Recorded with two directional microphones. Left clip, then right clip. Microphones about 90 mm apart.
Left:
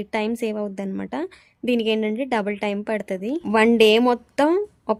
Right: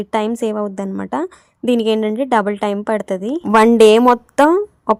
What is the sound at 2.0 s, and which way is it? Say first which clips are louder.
A woman's voice: right 8 dB; 30° right (ahead or behind).